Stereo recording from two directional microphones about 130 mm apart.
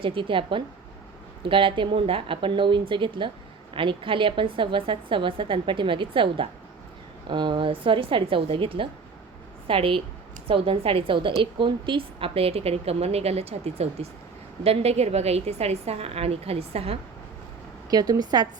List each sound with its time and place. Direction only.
0.0 s a woman's voice: 40° right (ahead or behind)
17.9 s a woman's voice: 30° right (ahead or behind)